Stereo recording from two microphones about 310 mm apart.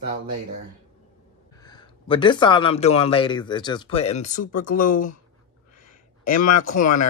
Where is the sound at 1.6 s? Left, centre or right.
Centre.